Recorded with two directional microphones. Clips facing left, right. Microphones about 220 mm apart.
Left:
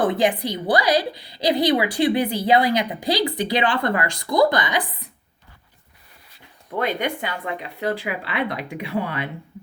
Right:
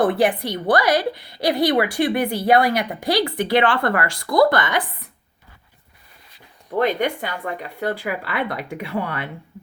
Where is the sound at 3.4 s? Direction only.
55° right (ahead or behind).